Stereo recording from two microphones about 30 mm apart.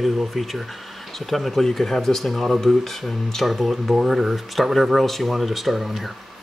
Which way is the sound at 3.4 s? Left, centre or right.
Centre.